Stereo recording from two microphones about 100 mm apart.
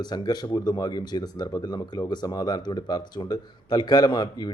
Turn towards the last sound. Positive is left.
turn(degrees=45)  # may be behind; listen again after turning